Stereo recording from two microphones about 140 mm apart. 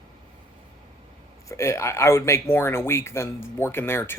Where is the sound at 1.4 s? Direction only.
20° left (ahead or behind).